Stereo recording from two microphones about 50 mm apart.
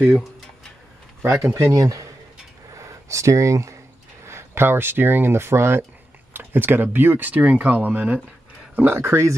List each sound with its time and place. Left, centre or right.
1.2 s speech: right
4.3 s speech: right
6.3 s speech: right
8.7 s speech: right